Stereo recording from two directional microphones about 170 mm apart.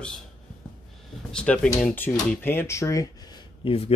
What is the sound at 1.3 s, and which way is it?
Speech, 5° left (ahead or behind).